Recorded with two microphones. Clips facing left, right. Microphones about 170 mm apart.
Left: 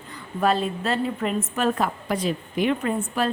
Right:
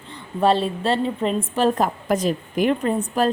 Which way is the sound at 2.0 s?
45° right (ahead or behind).